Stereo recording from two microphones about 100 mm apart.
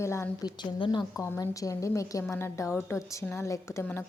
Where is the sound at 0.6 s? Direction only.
55° left (ahead or behind).